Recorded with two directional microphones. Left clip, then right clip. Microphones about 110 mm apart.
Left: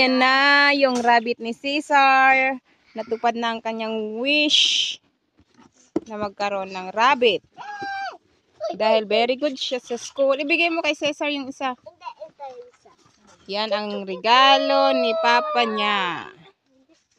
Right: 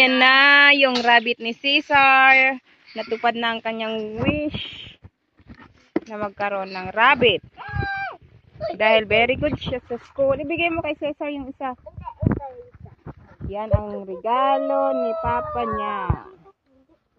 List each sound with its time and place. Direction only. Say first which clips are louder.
0.0 s speech: right 3 dB; 30° left (ahead or behind)
2.9 s speech: right 1 dB; 15° left (ahead or behind)
4.1 s speech: left 6 dB; 90° left; by 5.0 s 50° left (ahead or behind)
5.6 s speech: right 1 dB; 25° left (ahead or behind)
7.5 s goat: right 2 dB; 10° left (ahead or behind)
8.7 s speech: right 2 dB; 35° left (ahead or behind)
13.5 s speech: left 2 dB; 35° left (ahead or behind)